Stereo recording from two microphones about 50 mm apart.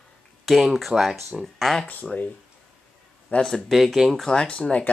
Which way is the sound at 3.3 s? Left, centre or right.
Left.